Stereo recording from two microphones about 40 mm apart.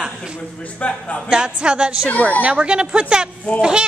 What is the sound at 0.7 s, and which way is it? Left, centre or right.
Speech, left.